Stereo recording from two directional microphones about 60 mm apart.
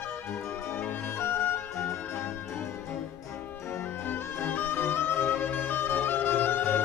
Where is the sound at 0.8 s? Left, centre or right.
Left.